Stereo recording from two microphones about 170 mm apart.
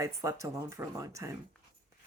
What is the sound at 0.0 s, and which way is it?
Speech, 20° right (ahead or behind).